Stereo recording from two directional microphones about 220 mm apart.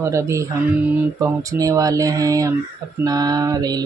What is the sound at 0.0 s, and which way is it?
Speech, 15° right (ahead or behind).